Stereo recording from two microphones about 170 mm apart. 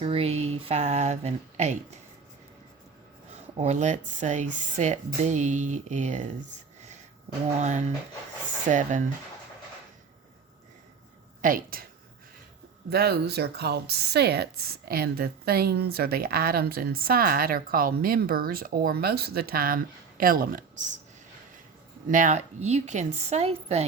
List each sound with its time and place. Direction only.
0.0 s speech: 35° right (ahead or behind)
3.6 s speech: 40° right (ahead or behind)
8.7 s speech: 50° right (ahead or behind)
11.4 s speech: 55° right (ahead or behind)
12.9 s speech: 65° right (ahead or behind); by 20.9 s 50° right (ahead or behind)
22.1 s speech: 45° right (ahead or behind)